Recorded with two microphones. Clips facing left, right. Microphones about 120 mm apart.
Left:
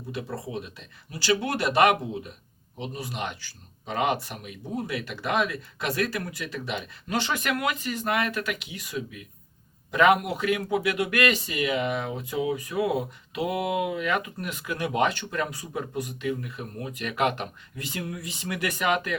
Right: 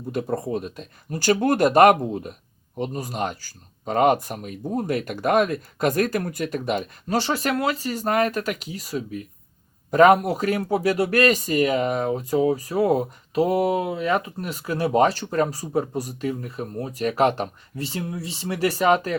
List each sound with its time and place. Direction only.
0.1 s speech: 45° right (ahead or behind)